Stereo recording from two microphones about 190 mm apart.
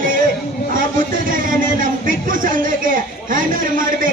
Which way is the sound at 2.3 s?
45° right (ahead or behind).